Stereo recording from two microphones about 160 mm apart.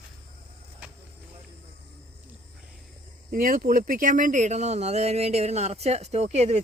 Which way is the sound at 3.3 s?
65° right (ahead or behind).